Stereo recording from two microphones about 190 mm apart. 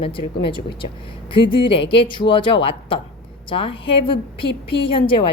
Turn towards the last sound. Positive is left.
turn(degrees=25)  # may be behind; listen again after turning